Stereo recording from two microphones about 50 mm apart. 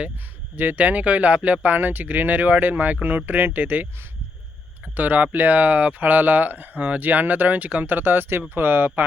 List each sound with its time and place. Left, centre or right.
0.5 s speech: right
4.9 s speech: right